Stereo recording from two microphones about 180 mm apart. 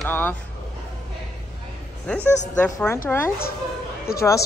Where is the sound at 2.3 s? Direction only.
40° left (ahead or behind).